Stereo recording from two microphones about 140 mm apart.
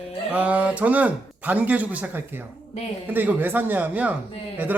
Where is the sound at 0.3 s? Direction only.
10° right (ahead or behind).